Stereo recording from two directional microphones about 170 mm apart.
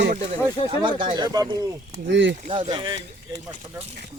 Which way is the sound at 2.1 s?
90° right.